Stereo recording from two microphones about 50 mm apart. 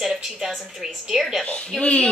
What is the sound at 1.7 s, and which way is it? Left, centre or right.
Speech, left.